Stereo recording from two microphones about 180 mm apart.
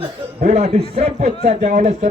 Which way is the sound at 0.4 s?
35° right (ahead or behind).